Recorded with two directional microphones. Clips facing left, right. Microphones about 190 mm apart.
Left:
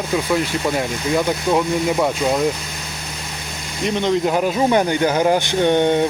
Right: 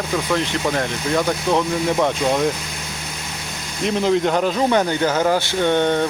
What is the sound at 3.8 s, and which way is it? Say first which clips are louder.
Speech: even; centre (ahead or behind).